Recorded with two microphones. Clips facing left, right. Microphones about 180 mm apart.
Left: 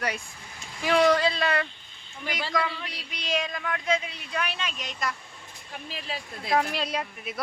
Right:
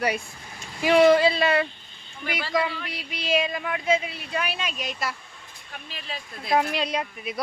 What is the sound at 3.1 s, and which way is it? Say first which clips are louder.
Speech: right 5 dB; 5° right (ahead or behind).